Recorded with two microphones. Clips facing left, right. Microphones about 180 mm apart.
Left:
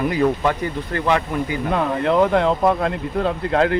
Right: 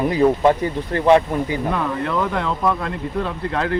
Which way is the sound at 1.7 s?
25° left (ahead or behind).